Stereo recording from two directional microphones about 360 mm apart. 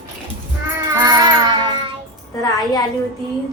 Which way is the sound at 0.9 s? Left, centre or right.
Centre.